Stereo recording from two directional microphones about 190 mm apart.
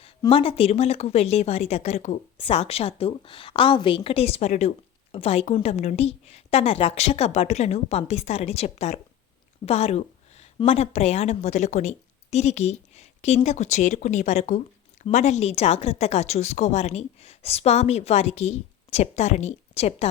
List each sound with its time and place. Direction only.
0.0 s a woman's voice: 30° left (ahead or behind)